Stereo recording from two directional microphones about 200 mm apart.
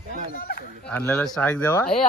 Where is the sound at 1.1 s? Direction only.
5° left (ahead or behind).